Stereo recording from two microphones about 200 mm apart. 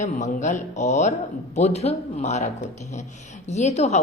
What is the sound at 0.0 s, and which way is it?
A woman's voice, 35° left (ahead or behind).